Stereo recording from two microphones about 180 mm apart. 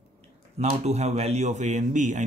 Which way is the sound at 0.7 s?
40° right (ahead or behind).